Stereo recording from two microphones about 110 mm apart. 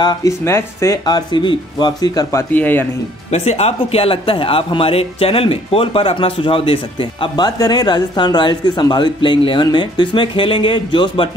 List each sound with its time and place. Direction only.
0.0 s speech: 40° left (ahead or behind)
0.3 s speech: 25° left (ahead or behind)
1.0 s speech: 45° left (ahead or behind)
2.5 s speech: 15° left (ahead or behind)
3.3 s speech: 90° left; by 11.2 s 45° left (ahead or behind)